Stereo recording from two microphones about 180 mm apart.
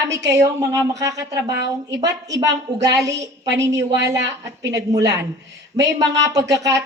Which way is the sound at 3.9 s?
75° right (ahead or behind).